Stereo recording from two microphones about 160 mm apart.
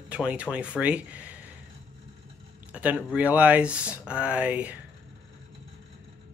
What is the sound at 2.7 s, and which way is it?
Speech, 10° right (ahead or behind).